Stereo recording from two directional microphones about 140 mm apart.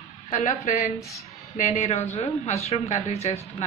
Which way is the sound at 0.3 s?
65° left (ahead or behind).